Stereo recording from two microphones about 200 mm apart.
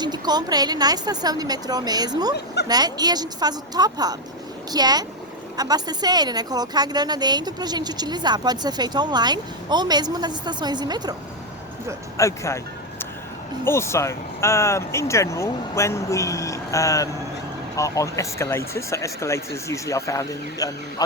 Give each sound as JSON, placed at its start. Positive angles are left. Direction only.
{"t": 0.0, "sound": "a woman's voice", "side_deg": -20}
{"t": 12.1, "sound": "speech", "side_deg": 15}
{"t": 13.7, "sound": "speech", "side_deg": 15}